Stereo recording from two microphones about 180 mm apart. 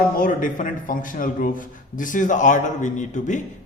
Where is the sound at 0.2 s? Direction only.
45° left (ahead or behind).